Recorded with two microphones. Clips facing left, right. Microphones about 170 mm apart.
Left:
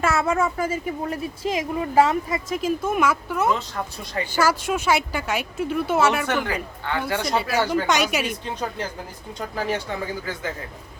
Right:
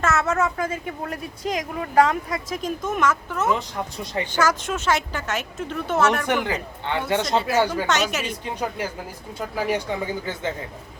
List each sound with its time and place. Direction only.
0.0 s speech: 10° left (ahead or behind)
3.5 s speech: 20° right (ahead or behind)
4.3 s speech: 10° left (ahead or behind)
6.2 s speech: 20° right (ahead or behind)
7.9 s speech: 10° left (ahead or behind)
8.4 s speech: 10° right (ahead or behind)